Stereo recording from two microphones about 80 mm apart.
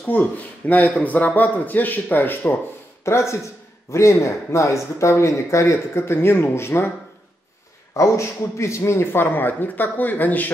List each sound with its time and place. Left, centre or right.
0.0 s a man's voice: centre
3.1 s speech: left
7.9 s a man's voice: left